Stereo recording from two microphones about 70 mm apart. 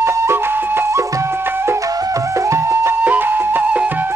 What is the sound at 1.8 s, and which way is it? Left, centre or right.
Flute, right.